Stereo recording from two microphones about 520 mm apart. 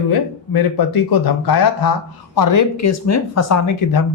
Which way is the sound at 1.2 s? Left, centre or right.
Left.